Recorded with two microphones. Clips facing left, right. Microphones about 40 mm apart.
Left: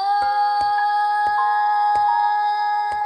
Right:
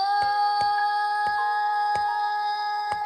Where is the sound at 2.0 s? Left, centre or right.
Centre.